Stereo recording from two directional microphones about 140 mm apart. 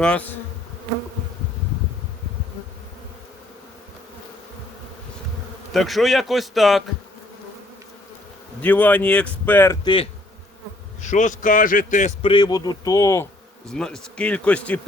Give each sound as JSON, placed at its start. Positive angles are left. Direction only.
{"t": 0.0, "sound": "speech", "side_deg": 10}
{"t": 5.7, "sound": "a man's voice", "side_deg": 0}
{"t": 8.6, "sound": "speech", "side_deg": 10}
{"t": 9.8, "sound": "speech", "side_deg": 40}
{"t": 11.0, "sound": "a man's voice", "side_deg": 60}
{"t": 12.2, "sound": "speech", "side_deg": 35}
{"t": 13.7, "sound": "speech", "side_deg": 5}